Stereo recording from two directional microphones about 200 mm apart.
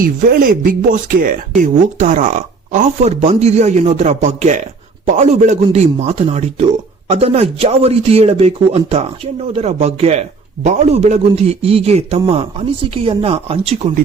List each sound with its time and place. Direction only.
0.0 s speech: 45° right (ahead or behind); by 13.9 s 30° right (ahead or behind)